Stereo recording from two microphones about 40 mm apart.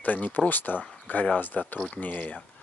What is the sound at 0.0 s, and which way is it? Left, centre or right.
Speech, left.